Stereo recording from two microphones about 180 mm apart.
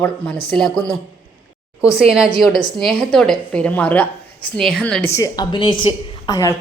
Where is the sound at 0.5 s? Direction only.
5° left (ahead or behind).